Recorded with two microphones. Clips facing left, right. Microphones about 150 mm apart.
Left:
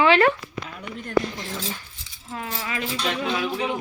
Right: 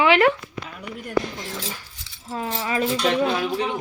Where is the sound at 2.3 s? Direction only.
30° right (ahead or behind).